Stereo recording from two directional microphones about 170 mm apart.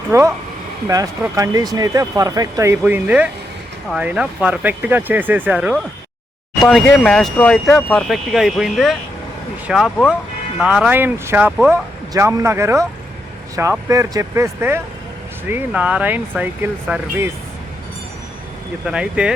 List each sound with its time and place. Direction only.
0.1 s speech: 15° right (ahead or behind)
12.1 s speech: 20° right (ahead or behind)
18.9 s speech: 5° right (ahead or behind)